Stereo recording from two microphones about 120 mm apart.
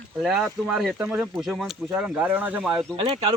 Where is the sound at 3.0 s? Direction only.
50° right (ahead or behind).